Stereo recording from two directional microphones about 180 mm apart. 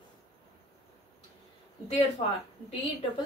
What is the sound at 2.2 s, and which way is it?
Speech, 35° left (ahead or behind).